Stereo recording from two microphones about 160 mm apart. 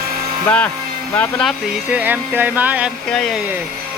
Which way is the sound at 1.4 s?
10° right (ahead or behind).